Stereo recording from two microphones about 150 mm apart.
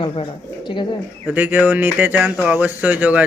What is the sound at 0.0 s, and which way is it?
Speech, 35° left (ahead or behind).